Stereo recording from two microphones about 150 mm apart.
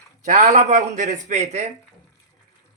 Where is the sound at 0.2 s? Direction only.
55° right (ahead or behind).